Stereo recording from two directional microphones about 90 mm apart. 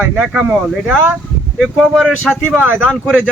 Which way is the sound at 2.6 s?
20° right (ahead or behind).